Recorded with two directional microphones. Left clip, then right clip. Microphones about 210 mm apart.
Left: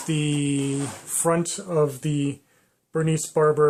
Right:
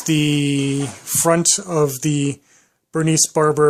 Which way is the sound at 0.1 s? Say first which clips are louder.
Right 7 dB; 35° right (ahead or behind).